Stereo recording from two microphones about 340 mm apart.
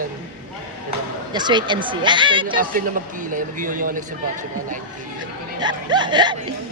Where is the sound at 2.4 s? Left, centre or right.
Right.